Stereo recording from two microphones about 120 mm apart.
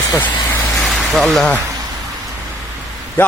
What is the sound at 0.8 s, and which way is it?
Vehicle, centre (ahead or behind).